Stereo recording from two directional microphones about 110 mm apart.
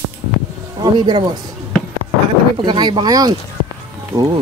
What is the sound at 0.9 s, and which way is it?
Speech, 45° right (ahead or behind).